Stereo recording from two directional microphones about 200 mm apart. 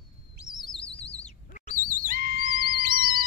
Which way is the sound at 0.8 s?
30° left (ahead or behind).